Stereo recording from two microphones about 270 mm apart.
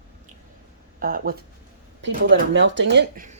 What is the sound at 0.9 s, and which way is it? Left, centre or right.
Speech, right.